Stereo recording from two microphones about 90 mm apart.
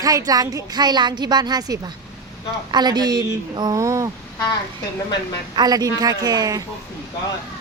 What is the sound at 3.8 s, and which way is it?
Speech, 35° right (ahead or behind).